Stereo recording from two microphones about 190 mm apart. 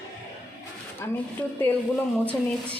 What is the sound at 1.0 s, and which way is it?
A woman's voice, 15° left (ahead or behind).